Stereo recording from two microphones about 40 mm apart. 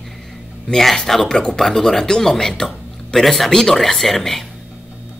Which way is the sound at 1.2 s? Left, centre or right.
Centre.